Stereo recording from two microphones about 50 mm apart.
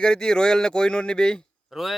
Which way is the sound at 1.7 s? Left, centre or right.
Centre.